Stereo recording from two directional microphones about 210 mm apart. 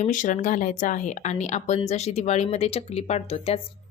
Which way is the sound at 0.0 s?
40° left (ahead or behind).